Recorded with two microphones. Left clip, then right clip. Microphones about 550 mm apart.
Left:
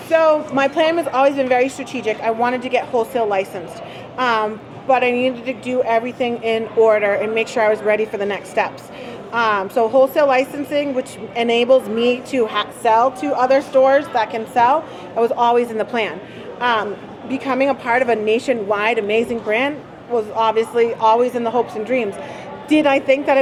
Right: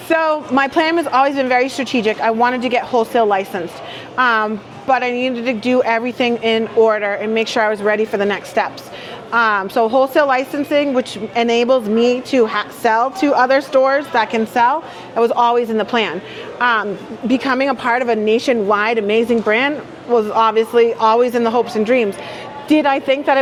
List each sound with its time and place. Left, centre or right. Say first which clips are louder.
0.1 s a woman's voice: left 1 dB; right
16.6 s a woman's voice: right 2 dB; right